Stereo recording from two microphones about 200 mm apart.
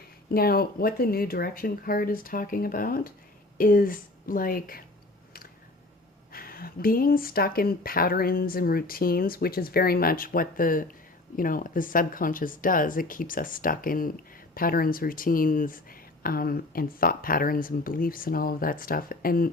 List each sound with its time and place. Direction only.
0.3 s speech: 50° left (ahead or behind)
6.3 s speech: 45° left (ahead or behind)